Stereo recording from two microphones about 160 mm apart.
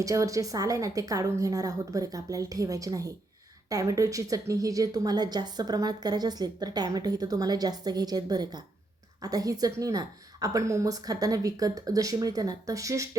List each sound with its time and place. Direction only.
0.0 s a woman's voice: 20° right (ahead or behind)